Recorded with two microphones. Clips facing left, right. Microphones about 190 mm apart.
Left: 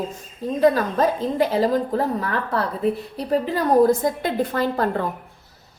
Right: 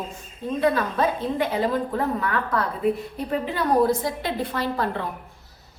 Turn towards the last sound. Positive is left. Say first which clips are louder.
# left 4 dB
turn(degrees=45)  # may be behind; listen again after turning